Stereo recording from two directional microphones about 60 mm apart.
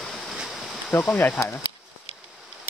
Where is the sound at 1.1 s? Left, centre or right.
Left.